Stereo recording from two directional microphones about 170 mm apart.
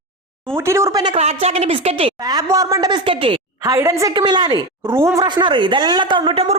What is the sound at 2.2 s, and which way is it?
Speech, 20° right (ahead or behind).